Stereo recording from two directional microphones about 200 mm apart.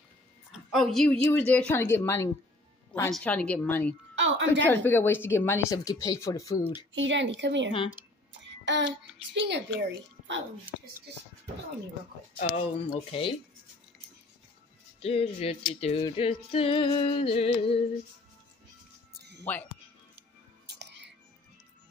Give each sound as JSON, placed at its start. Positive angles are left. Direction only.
{"t": 0.5, "sound": "a woman's voice", "side_deg": 0}
{"t": 4.1, "sound": "a woman's voice", "side_deg": -65}
{"t": 4.6, "sound": "speech", "side_deg": 10}
{"t": 6.9, "sound": "a woman's voice", "side_deg": -70}
{"t": 8.3, "sound": "child singing", "side_deg": -65}
{"t": 9.3, "sound": "a woman's voice", "side_deg": -60}
{"t": 12.4, "sound": "music", "side_deg": 30}
{"t": 15.0, "sound": "music", "side_deg": 30}
{"t": 19.1, "sound": "music", "side_deg": -55}
{"t": 20.6, "sound": "whispering", "side_deg": -55}